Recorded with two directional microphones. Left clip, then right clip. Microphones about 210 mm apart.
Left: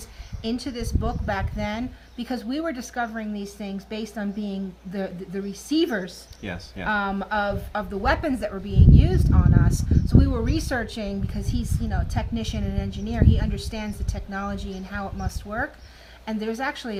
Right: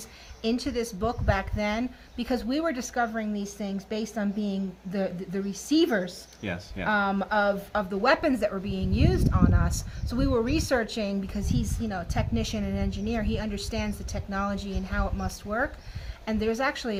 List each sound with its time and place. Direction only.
0.4 s speech: 20° right (ahead or behind)
6.4 s speech: 10° left (ahead or behind)
6.8 s speech: 10° right (ahead or behind)